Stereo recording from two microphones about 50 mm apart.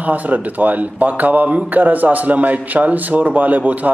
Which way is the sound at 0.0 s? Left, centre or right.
Right.